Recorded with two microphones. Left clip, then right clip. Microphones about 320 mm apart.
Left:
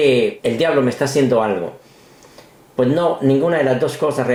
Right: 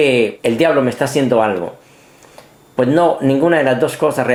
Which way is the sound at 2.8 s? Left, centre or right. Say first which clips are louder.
Right 3 dB; centre.